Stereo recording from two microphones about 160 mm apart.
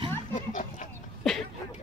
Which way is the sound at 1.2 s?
Centre (ahead or behind).